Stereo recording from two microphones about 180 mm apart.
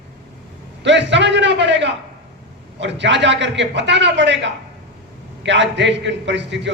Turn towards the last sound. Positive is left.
turn(degrees=-80)